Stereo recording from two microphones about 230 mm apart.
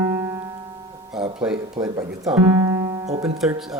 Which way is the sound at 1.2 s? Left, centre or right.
Centre.